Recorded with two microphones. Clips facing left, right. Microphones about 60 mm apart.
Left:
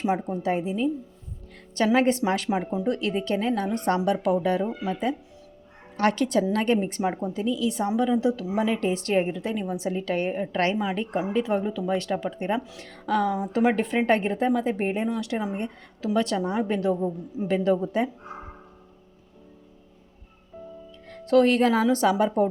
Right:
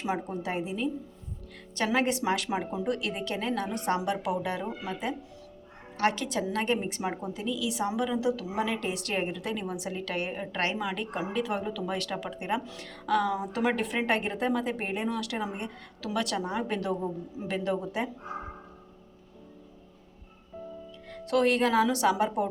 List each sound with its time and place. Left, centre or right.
0.0 s a woman's voice: left
0.5 s a woman's voice: left
6.0 s a woman's voice: left
7.9 s a woman's voice: left
21.1 s a woman's voice: left